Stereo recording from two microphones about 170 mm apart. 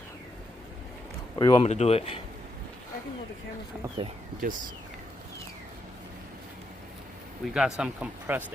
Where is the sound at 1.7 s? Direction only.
40° left (ahead or behind).